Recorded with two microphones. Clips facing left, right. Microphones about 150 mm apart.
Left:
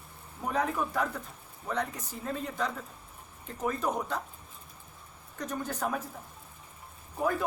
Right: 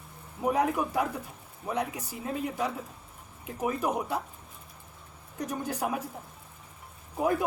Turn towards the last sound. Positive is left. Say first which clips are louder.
# right 3 dB
turn(degrees=-15)  # may be behind; listen again after turning